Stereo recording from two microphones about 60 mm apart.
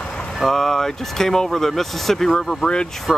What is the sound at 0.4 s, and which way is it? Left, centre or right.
Speech, centre.